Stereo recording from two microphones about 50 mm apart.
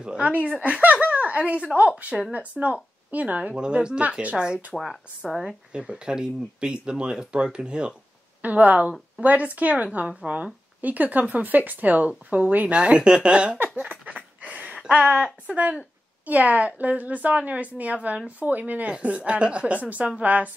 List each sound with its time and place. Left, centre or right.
0.0 s a woman's voice: centre
4.7 s speech: centre
5.7 s a woman's voice: centre
8.4 s a woman's voice: right
13.7 s duck: right
14.4 s a sound: right
14.9 s a woman's voice: right